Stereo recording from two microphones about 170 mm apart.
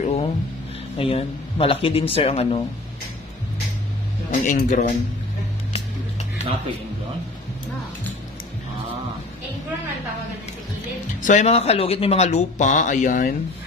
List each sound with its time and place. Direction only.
0.0 s a sound: 40° left (ahead or behind)
0.9 s speech: 35° left (ahead or behind)
4.3 s speech: 50° left (ahead or behind)
11.2 s speech: 40° left (ahead or behind)